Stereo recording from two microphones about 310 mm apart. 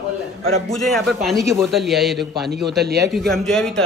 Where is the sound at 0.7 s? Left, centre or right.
Centre.